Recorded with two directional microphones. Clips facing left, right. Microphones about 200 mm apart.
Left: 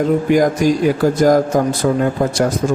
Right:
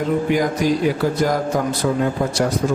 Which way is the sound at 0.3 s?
45° left (ahead or behind).